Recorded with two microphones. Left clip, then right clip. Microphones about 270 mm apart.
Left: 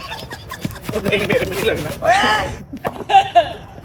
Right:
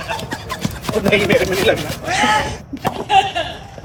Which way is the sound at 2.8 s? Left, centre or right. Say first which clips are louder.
Left 1 dB; centre.